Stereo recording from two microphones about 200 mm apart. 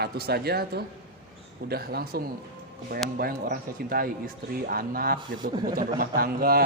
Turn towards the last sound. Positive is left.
turn(degrees=-50)  # may be behind; listen again after turning